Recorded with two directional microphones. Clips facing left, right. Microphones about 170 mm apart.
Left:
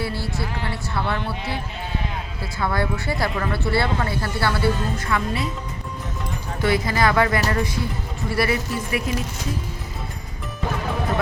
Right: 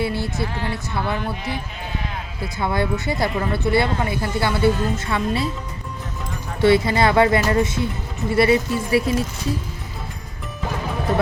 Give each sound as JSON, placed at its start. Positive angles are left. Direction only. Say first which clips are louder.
{"t": 0.0, "sound": "speech", "louder": "right 4 dB", "side_deg": -20}
{"t": 6.6, "sound": "speech", "louder": "right 5 dB", "side_deg": -25}